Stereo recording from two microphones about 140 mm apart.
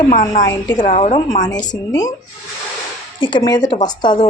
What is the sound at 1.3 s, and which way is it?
Speech, 25° left (ahead or behind).